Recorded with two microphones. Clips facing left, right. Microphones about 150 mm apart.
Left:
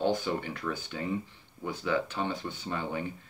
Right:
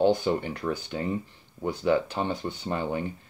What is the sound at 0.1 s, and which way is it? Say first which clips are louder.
Speech: right 5 dB; 40° right (ahead or behind).